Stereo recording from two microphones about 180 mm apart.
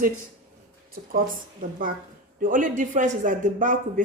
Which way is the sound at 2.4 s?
45° right (ahead or behind).